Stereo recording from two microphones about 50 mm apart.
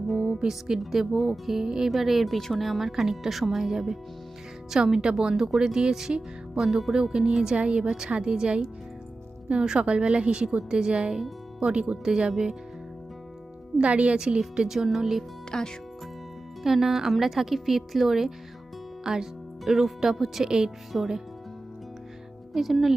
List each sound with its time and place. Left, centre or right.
0.1 s a woman's voice: centre
13.7 s a woman's voice: right; by 15.2 s centre
15.4 s speech: centre
16.6 s speech: centre
20.9 s speech: centre
22.5 s speech: centre